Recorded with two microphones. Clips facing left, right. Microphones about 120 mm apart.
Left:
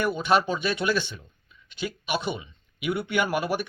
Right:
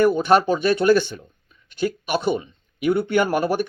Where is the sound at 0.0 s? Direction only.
45° right (ahead or behind).